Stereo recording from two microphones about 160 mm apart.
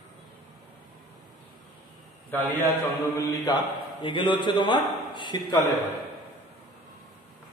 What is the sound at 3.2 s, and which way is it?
A man's voice, 25° left (ahead or behind).